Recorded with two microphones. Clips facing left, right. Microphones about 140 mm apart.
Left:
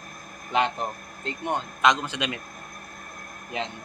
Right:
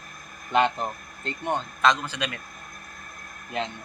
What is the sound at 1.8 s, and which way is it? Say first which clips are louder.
Speech: left 1 dB; 20° left (ahead or behind).